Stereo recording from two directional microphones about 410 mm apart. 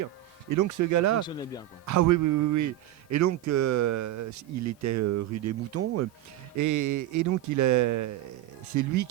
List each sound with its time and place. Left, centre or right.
0.5 s speech: right
1.2 s a man's voice: centre
1.9 s speech: right
6.6 s speech: right